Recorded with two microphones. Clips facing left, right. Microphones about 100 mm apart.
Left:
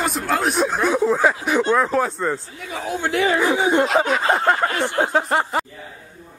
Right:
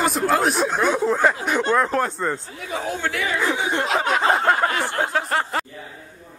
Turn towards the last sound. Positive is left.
turn(degrees=15)  # may be behind; listen again after turning